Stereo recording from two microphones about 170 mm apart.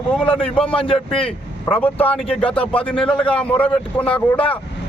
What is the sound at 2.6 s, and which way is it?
A man's voice, 5° left (ahead or behind).